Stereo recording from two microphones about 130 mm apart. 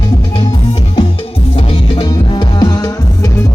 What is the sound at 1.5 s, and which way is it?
Music, 40° left (ahead or behind).